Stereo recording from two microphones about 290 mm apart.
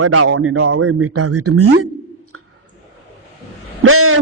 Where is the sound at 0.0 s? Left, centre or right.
Right.